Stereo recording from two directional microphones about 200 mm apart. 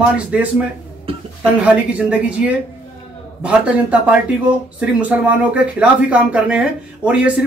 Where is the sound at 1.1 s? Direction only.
30° right (ahead or behind).